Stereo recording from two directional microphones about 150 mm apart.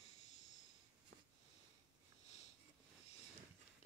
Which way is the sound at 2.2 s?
50° left (ahead or behind).